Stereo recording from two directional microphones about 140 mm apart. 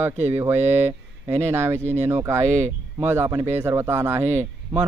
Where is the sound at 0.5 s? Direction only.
50° right (ahead or behind).